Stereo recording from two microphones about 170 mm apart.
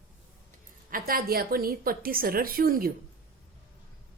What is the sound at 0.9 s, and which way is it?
A woman's voice, 60° right (ahead or behind).